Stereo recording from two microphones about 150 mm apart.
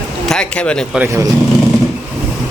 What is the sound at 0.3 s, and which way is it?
Speech, 5° left (ahead or behind).